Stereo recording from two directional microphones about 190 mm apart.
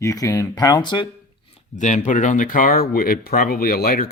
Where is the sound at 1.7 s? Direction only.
40° left (ahead or behind).